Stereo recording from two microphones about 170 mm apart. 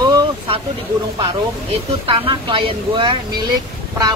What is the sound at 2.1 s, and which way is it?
Speech, 30° right (ahead or behind).